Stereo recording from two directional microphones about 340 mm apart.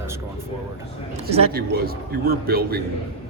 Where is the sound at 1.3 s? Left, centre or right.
Right.